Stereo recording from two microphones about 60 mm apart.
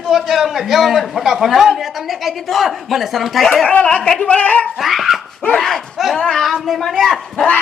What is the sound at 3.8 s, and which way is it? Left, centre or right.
Speech, left.